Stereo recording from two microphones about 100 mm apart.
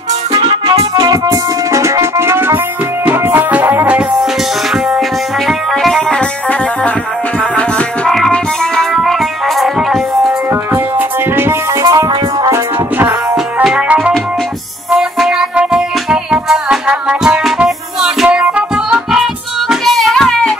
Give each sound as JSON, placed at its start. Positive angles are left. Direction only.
{"t": 0.3, "sound": "music", "side_deg": -45}
{"t": 5.5, "sound": "music", "side_deg": 0}
{"t": 8.1, "sound": "music", "side_deg": 5}
{"t": 10.5, "sound": "music", "side_deg": -20}
{"t": 11.8, "sound": "music", "side_deg": -35}
{"t": 13.7, "sound": "music", "side_deg": -5}
{"t": 19.7, "sound": "child singing", "side_deg": 0}